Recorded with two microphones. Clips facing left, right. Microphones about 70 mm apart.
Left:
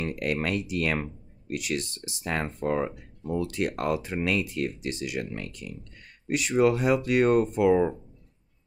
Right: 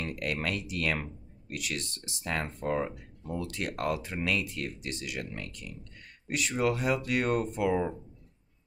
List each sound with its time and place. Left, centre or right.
0.0 s speech: left